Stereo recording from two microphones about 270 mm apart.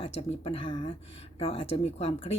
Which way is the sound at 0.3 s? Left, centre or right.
Centre.